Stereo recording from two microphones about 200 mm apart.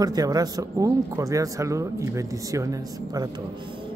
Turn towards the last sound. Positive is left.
turn(degrees=-15)  # may be behind; listen again after turning